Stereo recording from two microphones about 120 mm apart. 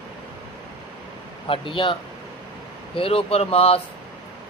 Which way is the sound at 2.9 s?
50° left (ahead or behind).